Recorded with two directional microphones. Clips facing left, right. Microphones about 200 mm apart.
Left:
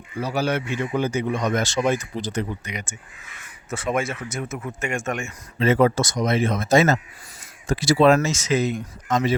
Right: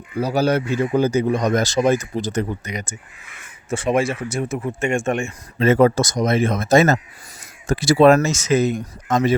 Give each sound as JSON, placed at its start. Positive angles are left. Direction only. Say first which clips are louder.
{"t": 0.2, "sound": "speech", "louder": "right 5 dB", "side_deg": -40}
{"t": 3.7, "sound": "speech", "louder": "right 5 dB", "side_deg": -30}
{"t": 5.5, "sound": "speech", "louder": "right 3 dB", "side_deg": -45}